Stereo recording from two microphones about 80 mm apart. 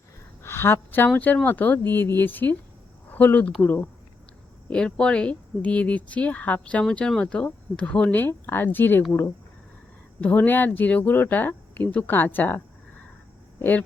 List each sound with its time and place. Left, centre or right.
0.4 s speech: left
4.7 s speech: centre
8.2 s speech: left
10.2 s speech: left